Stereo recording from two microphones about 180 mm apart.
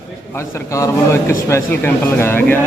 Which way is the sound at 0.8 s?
15° left (ahead or behind).